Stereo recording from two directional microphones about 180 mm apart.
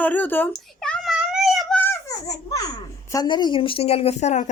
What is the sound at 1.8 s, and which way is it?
Babbling, 10° left (ahead or behind).